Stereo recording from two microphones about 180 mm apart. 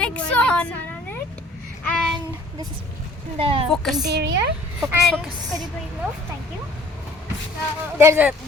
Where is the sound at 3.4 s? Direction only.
30° right (ahead or behind).